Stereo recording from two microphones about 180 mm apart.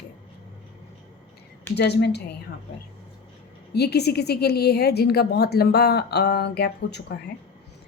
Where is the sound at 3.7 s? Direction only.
65° left (ahead or behind).